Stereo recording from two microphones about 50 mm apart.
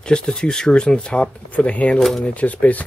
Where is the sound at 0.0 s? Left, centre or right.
Centre.